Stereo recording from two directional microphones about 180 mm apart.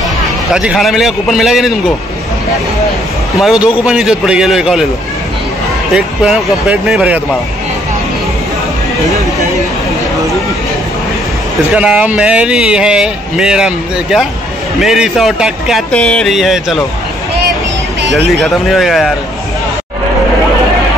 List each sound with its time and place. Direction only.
0.5 s speech: 5° right (ahead or behind)
3.3 s speech: centre (ahead or behind)
5.9 s speech: 5° right (ahead or behind)
11.7 s speech: 5° right (ahead or behind)
18.4 s speech: centre (ahead or behind)